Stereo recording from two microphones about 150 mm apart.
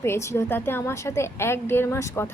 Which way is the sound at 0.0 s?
15° left (ahead or behind).